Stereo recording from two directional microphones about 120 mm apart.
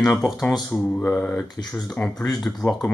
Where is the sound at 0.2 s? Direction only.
Centre (ahead or behind).